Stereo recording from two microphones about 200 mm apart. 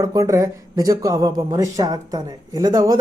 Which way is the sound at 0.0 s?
20° right (ahead or behind).